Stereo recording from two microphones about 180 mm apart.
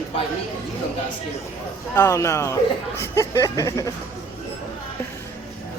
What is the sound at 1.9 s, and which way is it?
Speech, 15° left (ahead or behind).